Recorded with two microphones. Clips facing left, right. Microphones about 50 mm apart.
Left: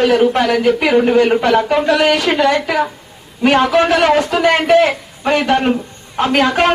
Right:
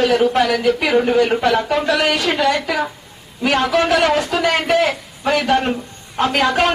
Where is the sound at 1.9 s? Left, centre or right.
Left.